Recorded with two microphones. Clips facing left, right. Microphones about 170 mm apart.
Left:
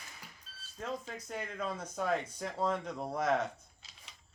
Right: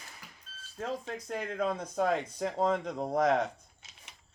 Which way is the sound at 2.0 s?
35° right (ahead or behind).